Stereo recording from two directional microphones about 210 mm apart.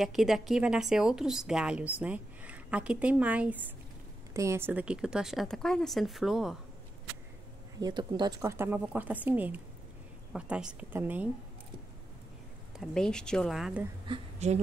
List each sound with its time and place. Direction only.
0.0 s a woman's voice: centre (ahead or behind)
7.8 s a woman's voice: 20° right (ahead or behind)
12.7 s a woman's voice: centre (ahead or behind)
14.0 s a woman's voice: 30° right (ahead or behind)